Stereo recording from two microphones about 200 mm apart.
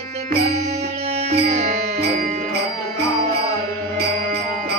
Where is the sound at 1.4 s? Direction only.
35° right (ahead or behind).